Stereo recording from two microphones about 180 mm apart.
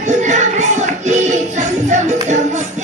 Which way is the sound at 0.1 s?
40° right (ahead or behind).